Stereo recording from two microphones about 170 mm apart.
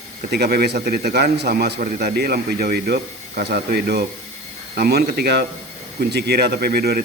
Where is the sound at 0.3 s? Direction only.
75° right (ahead or behind).